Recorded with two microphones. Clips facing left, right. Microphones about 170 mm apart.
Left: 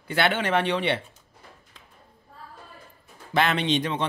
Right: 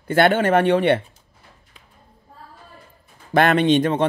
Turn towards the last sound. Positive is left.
turn(degrees=-50)  # may be behind; listen again after turning